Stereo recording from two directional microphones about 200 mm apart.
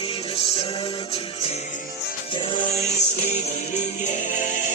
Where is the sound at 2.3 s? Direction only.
25° left (ahead or behind).